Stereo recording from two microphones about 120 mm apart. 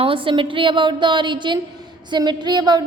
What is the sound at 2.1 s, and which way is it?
Speech, 40° right (ahead or behind).